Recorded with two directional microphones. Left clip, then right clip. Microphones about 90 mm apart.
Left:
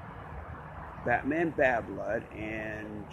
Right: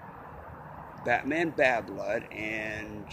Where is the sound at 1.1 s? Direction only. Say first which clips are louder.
Right 1 dB; 15° right (ahead or behind).